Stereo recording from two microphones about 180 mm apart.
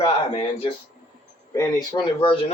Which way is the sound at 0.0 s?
30° left (ahead or behind).